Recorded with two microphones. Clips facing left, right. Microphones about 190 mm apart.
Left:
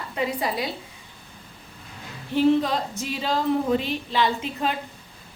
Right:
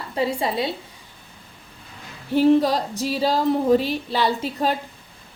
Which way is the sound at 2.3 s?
40° right (ahead or behind).